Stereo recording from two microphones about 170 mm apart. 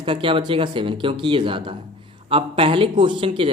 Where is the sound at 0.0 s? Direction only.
30° right (ahead or behind).